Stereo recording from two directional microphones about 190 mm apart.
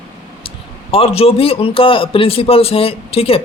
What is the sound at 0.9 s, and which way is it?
A man's voice, 30° left (ahead or behind).